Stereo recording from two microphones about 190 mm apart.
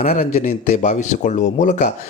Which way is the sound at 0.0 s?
35° left (ahead or behind).